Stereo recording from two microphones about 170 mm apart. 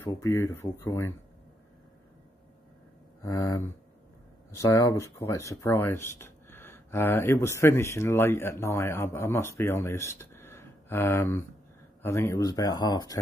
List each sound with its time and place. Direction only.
0.0 s speech: 15° left (ahead or behind)
3.2 s speech: 20° left (ahead or behind)